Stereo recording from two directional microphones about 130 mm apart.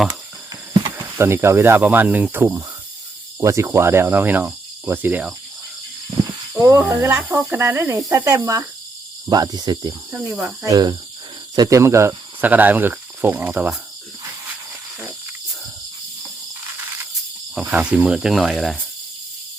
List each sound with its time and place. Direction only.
0.1 s a sound: 30° right (ahead or behind)
1.2 s speech: 20° right (ahead or behind)
6.5 s a sound: 20° right (ahead or behind)
6.7 s speech: 10° right (ahead or behind)
9.3 s cricket: 30° right (ahead or behind)
10.1 s speech: 5° right (ahead or behind)
10.7 s cricket: 30° right (ahead or behind)
11.5 s speech: 25° right (ahead or behind); by 13.7 s 10° right (ahead or behind)
17.5 s cricket: 10° right (ahead or behind)